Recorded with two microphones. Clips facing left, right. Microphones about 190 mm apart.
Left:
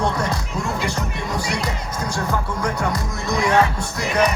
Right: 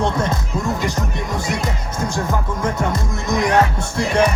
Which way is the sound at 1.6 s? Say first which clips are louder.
Right 2 dB; 20° right (ahead or behind).